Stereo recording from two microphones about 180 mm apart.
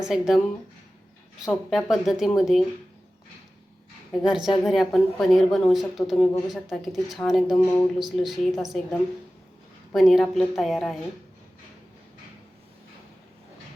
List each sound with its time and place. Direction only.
0.0 s speech: centre (ahead or behind)
1.5 s speech: centre (ahead or behind)
4.2 s speech: centre (ahead or behind)
9.9 s speech: centre (ahead or behind)